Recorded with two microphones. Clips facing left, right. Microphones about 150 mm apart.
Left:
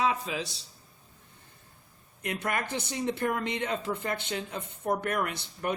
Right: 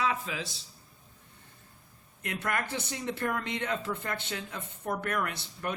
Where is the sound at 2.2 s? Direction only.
20° left (ahead or behind).